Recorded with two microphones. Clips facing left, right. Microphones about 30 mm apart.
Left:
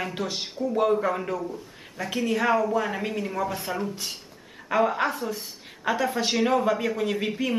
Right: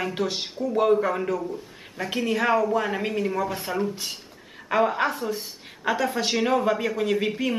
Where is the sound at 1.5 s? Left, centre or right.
Centre.